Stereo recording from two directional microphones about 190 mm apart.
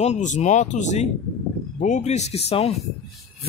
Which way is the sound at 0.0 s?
40° left (ahead or behind).